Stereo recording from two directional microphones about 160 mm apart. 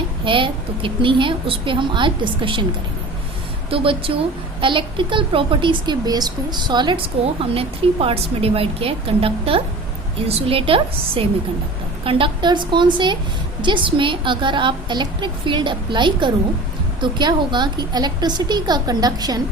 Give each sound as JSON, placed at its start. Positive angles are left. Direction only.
{"t": 0.3, "sound": "speech", "side_deg": -30}
{"t": 3.7, "sound": "a woman's voice", "side_deg": -35}